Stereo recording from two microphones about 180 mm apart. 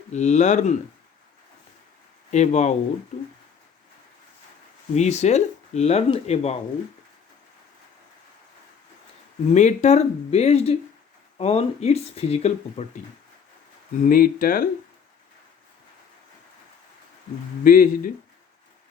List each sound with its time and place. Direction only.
0.1 s speech: 40° left (ahead or behind)
2.3 s speech: 40° left (ahead or behind)
4.9 s speech: 40° left (ahead or behind)
9.5 s speech: 40° left (ahead or behind)
14.0 s speech: 50° left (ahead or behind)
17.6 s speech: 50° left (ahead or behind)